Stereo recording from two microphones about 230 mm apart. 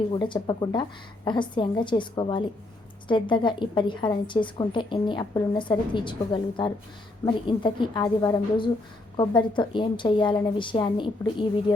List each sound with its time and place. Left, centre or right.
0.1 s a woman's voice: centre